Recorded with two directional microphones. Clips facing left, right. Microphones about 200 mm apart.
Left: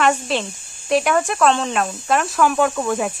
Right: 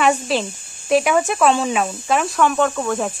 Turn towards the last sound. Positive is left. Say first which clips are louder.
# even
turn(degrees=5)  # may be behind; listen again after turning